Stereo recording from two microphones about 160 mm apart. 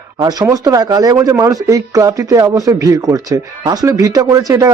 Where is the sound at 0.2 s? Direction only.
25° right (ahead or behind).